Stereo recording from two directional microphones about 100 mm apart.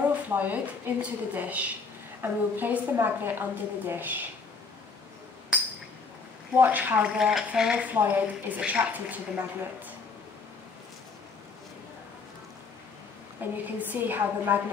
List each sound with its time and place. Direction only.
0.3 s a woman's voice: 15° right (ahead or behind)
6.6 s speech: 15° right (ahead or behind)
13.4 s a woman's voice: 20° right (ahead or behind)